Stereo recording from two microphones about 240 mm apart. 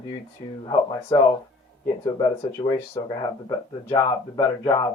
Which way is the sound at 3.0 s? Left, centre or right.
Centre.